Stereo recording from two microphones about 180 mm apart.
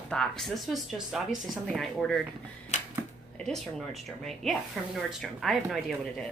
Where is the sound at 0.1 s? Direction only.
5° left (ahead or behind).